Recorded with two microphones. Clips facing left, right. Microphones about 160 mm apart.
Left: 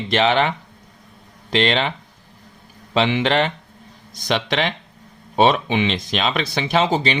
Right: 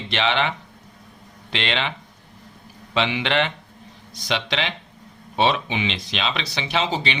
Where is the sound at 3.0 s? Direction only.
40° left (ahead or behind).